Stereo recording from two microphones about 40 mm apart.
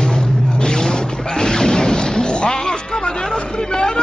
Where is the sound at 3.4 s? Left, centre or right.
Left.